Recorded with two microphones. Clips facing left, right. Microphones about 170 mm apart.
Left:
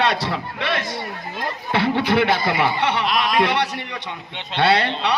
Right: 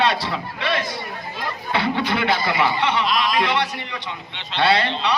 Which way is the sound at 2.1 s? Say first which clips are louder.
Left 3 dB; 55° left (ahead or behind).